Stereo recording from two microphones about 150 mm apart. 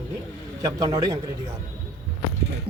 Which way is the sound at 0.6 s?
20° right (ahead or behind).